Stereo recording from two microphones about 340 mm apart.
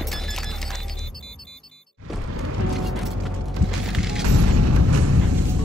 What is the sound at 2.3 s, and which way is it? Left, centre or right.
Music, right.